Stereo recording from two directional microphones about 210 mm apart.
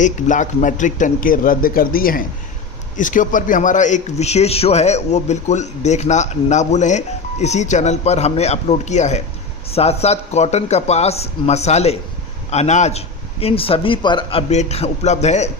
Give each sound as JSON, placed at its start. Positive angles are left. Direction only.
{"t": 0.0, "sound": "a man's voice", "side_deg": 35}